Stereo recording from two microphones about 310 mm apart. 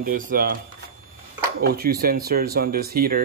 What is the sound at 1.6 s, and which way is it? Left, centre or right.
Speech, right.